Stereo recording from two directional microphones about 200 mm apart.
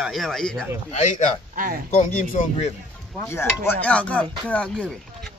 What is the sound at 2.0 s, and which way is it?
Speech, 35° left (ahead or behind).